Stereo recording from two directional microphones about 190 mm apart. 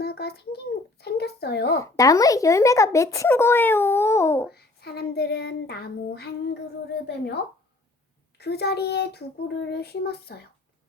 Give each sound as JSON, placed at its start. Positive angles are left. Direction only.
{"t": 0.0, "sound": "a child's voice", "side_deg": 55}
{"t": 1.8, "sound": "speech", "side_deg": 20}
{"t": 4.5, "sound": "child singing", "side_deg": 55}
{"t": 8.4, "sound": "child singing", "side_deg": 60}